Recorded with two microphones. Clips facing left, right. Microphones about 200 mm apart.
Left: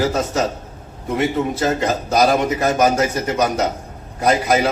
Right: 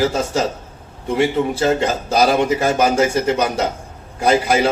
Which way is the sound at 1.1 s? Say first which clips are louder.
Right 2 dB; 30° right (ahead or behind).